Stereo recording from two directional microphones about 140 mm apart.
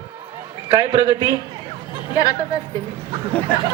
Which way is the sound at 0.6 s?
40° right (ahead or behind).